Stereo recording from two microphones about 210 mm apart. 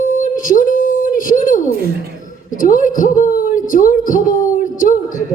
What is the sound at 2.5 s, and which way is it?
A woman's voice, 40° left (ahead or behind).